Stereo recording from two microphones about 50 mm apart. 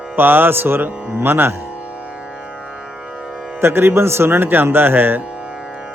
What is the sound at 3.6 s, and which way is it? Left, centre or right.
Speech, right.